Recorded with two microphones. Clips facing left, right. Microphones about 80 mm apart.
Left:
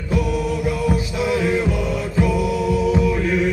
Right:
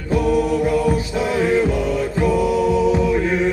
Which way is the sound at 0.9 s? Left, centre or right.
Right.